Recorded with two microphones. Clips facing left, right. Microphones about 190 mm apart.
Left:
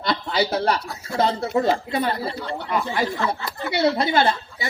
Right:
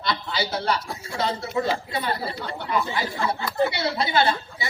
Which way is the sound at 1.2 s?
50° left (ahead or behind).